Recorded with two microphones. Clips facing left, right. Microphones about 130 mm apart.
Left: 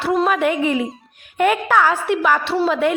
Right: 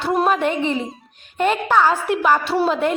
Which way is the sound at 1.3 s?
20° right (ahead or behind).